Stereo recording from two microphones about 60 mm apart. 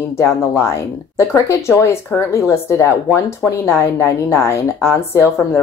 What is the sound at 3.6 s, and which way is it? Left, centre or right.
Speech, left.